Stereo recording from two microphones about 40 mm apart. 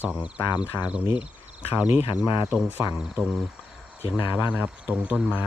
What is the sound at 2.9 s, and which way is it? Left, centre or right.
Speech, right.